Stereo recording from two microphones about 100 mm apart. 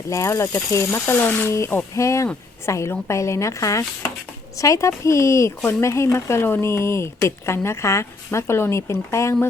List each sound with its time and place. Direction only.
0.1 s speech: 30° left (ahead or behind)